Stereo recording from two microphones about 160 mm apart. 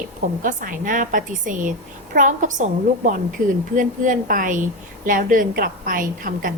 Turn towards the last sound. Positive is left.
turn(degrees=-60)  # may be behind; listen again after turning